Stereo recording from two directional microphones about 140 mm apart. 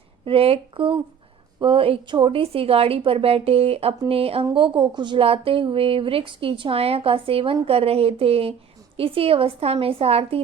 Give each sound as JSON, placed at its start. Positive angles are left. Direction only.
{"t": 0.3, "sound": "a woman's voice", "side_deg": -40}